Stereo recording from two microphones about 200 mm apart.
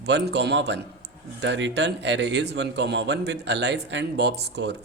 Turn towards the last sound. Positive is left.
turn(degrees=-55)  # may be behind; listen again after turning